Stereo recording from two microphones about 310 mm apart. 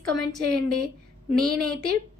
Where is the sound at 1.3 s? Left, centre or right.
Right.